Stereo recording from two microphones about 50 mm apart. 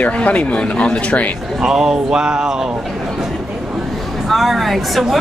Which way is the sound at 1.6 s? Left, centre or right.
Centre.